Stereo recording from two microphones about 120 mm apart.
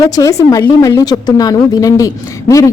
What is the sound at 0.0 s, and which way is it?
A woman's voice, 30° left (ahead or behind).